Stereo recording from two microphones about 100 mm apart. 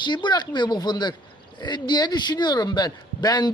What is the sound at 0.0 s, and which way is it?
Speech, 50° left (ahead or behind).